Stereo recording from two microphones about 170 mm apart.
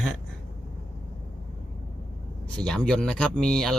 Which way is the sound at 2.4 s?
5° left (ahead or behind).